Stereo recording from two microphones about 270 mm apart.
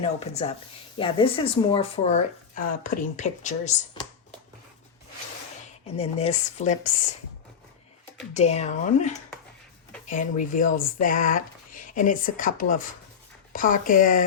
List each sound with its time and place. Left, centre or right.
0.0 s speech: left
6.0 s speech: left
8.3 s speech: left